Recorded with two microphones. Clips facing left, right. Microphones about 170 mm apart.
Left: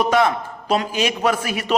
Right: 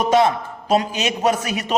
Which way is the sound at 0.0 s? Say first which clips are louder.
Right 1 dB; 20° right (ahead or behind).